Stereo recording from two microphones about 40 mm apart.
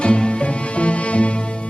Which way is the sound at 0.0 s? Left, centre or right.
Left.